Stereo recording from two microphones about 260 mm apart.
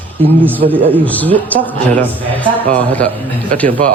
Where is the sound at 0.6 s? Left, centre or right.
Right.